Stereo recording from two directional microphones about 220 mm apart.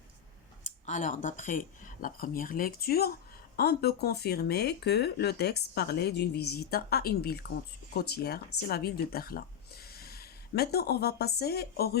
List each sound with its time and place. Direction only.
0.6 s speech: 35° left (ahead or behind)